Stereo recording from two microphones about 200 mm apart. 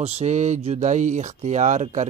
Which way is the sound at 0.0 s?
35° right (ahead or behind).